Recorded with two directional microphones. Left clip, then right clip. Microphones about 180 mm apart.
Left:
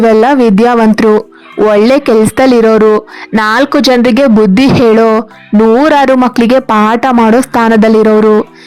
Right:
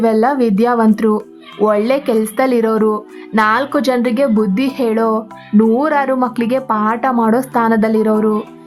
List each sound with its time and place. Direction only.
0.0 s a woman's voice: 35° left (ahead or behind)